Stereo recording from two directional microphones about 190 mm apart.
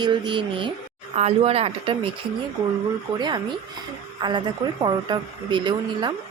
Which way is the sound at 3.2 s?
25° right (ahead or behind).